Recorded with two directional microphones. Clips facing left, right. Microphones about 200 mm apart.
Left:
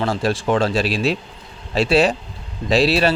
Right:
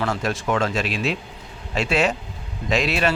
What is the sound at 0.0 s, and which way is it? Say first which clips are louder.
Speech: left 4 dB; 30° left (ahead or behind).